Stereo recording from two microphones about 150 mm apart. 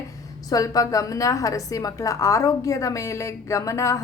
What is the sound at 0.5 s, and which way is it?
A woman's voice, 25° left (ahead or behind).